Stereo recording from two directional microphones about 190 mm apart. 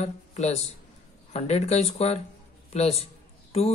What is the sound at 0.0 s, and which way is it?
Speech, 35° left (ahead or behind).